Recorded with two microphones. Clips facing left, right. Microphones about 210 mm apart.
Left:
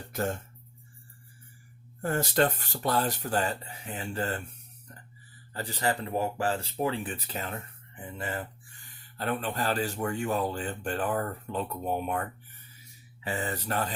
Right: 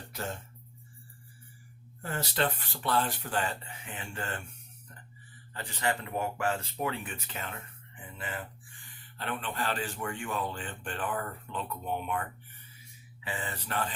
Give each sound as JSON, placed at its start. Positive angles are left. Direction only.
{"t": 0.1, "sound": "speech", "side_deg": 50}
{"t": 2.0, "sound": "speech", "side_deg": 45}
{"t": 5.5, "sound": "speech", "side_deg": 35}